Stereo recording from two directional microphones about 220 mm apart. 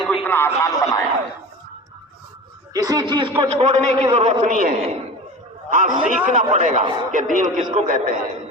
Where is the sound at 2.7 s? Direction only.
15° right (ahead or behind); by 8.2 s 40° right (ahead or behind).